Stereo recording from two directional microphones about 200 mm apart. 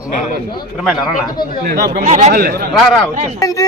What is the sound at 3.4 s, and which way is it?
Speech, 15° left (ahead or behind).